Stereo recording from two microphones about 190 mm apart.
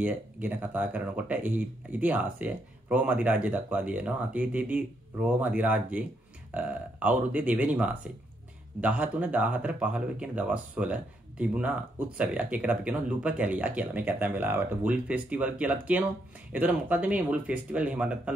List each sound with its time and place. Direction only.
0.0 s speech: 10° right (ahead or behind)